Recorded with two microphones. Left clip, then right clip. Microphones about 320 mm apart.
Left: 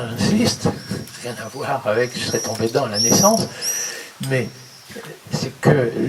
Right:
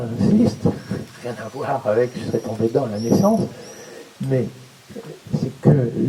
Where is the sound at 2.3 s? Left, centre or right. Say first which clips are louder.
Even; centre.